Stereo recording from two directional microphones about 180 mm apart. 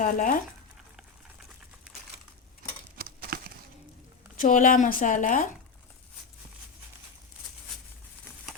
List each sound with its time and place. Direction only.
0.0 s speech: 50° left (ahead or behind)
3.0 s a sound: 55° right (ahead or behind)
4.4 s speech: 45° left (ahead or behind)